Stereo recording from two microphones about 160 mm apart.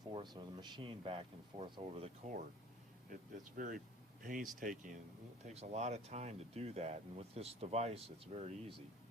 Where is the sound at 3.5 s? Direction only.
55° right (ahead or behind).